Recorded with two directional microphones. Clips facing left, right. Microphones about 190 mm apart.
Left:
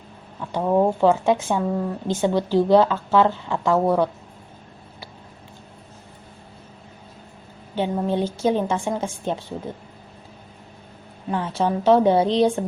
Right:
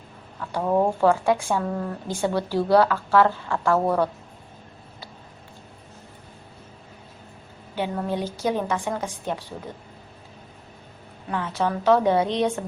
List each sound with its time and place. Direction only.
0.3 s speech: 10° left (ahead or behind)
1.0 s a woman's voice: 20° left (ahead or behind)
7.8 s a woman's voice: 30° left (ahead or behind)
11.3 s a woman's voice: 30° left (ahead or behind)